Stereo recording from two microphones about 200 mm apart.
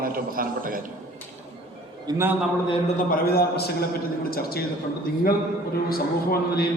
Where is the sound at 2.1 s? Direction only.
10° right (ahead or behind).